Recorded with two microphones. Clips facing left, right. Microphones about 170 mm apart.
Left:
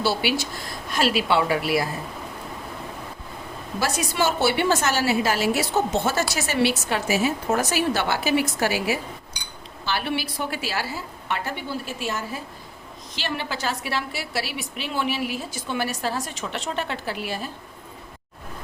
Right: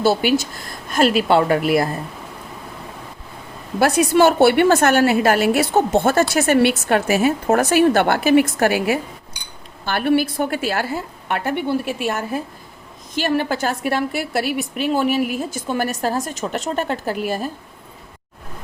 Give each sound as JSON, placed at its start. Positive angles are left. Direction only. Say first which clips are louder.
{"t": 0.0, "sound": "a woman's voice", "louder": "right 7 dB", "side_deg": -50}
{"t": 3.8, "sound": "a woman's voice", "louder": "right 10 dB", "side_deg": -60}